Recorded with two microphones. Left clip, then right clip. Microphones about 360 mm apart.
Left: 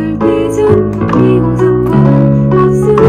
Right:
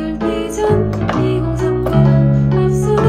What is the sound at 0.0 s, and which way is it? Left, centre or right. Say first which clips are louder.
Music: left 8 dB; centre.